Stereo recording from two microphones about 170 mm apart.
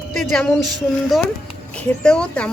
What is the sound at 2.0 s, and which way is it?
Speech, 5° left (ahead or behind).